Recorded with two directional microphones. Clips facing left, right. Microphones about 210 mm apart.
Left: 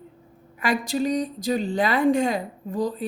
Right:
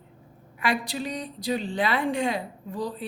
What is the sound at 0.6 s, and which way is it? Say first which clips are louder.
A woman's voice: left 5 dB; 45° left (ahead or behind).